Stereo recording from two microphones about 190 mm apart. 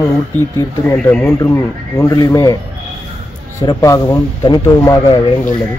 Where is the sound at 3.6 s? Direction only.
15° left (ahead or behind).